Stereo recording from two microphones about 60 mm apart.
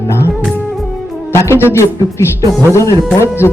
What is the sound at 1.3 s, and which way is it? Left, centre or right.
Speech, left.